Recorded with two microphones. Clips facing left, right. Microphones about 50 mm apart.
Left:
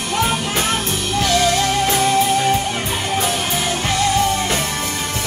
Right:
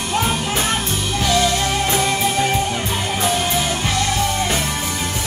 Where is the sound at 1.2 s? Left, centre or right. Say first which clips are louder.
Left 1 dB; centre.